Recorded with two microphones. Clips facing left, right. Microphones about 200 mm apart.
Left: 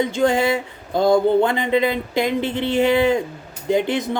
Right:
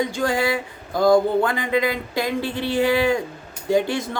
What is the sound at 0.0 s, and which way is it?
Speech, 25° left (ahead or behind).